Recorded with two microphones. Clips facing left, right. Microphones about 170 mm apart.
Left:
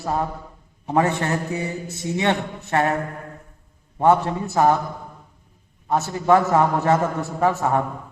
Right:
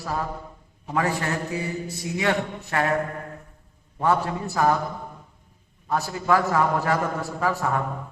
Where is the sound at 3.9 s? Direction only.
25° left (ahead or behind).